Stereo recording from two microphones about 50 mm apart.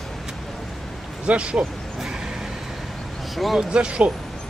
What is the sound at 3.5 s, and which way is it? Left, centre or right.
Speech, centre.